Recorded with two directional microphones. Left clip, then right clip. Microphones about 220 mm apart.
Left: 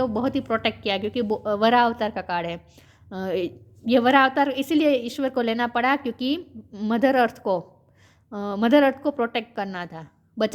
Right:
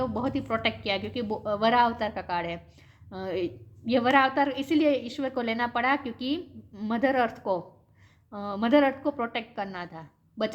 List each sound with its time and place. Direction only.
0.0 s a woman's voice: 45° left (ahead or behind)